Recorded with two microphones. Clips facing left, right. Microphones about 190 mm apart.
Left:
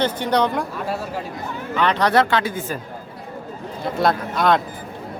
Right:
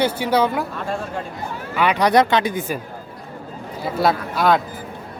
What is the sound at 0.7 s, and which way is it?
Speech, 5° left (ahead or behind).